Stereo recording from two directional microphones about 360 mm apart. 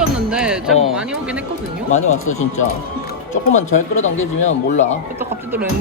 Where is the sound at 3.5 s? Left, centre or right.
Centre.